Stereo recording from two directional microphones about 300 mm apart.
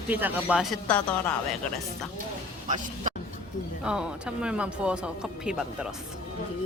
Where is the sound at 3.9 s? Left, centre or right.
Centre.